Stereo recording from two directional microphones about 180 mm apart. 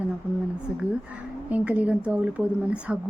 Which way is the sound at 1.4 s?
10° right (ahead or behind).